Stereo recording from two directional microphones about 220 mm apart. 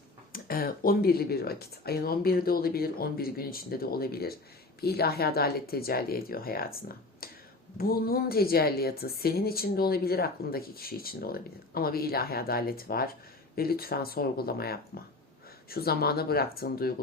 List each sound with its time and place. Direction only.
0.3 s a woman's voice: 40° left (ahead or behind)